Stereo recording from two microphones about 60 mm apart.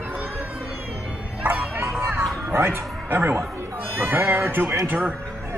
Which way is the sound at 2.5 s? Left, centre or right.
Right.